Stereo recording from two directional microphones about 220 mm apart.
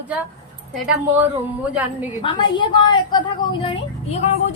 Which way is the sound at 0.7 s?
5° right (ahead or behind).